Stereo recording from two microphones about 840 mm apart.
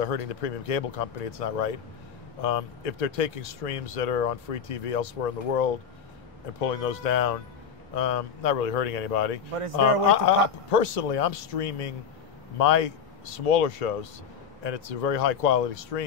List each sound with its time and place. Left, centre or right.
0.0 s speech: left
9.6 s speech: right
10.0 s speech: left